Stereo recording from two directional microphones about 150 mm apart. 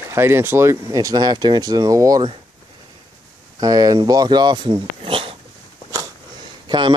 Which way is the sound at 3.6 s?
25° right (ahead or behind).